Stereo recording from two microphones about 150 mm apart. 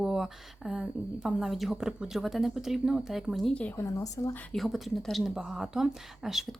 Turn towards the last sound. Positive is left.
turn(degrees=0)  # may be behind; listen again after turning